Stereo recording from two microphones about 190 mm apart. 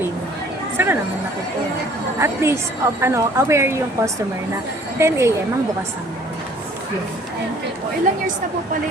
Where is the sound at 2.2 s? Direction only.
15° right (ahead or behind).